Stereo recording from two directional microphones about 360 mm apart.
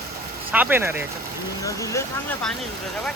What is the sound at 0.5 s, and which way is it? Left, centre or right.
Speech, centre.